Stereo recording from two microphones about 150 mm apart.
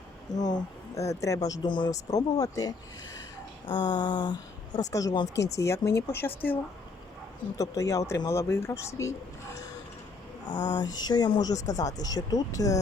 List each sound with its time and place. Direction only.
0.4 s a woman's voice: 25° left (ahead or behind)
7.6 s a woman's voice: 20° left (ahead or behind)
10.5 s a sound: 55° left (ahead or behind)
10.8 s a woman's voice: 30° left (ahead or behind)